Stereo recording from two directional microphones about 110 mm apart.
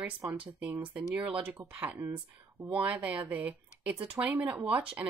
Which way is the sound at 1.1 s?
10° right (ahead or behind).